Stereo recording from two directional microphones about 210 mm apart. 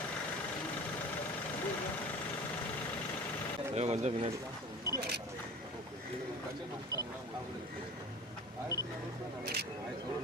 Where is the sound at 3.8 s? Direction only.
30° right (ahead or behind).